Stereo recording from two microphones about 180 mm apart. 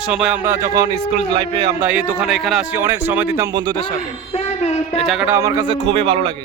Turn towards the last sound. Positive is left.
turn(degrees=-30)  # may be behind; listen again after turning